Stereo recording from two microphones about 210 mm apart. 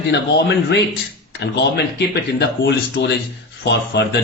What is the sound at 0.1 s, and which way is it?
A man's voice, 55° left (ahead or behind).